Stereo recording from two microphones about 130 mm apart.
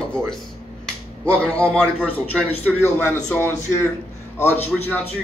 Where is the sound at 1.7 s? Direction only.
10° left (ahead or behind).